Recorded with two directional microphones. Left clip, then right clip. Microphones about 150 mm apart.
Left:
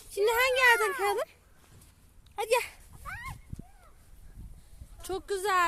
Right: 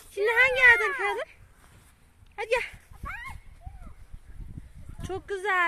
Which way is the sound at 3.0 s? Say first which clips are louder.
Right 3 dB; 60° left (ahead or behind).